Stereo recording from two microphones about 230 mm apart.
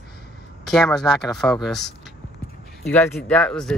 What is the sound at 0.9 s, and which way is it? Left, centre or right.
Speech, centre.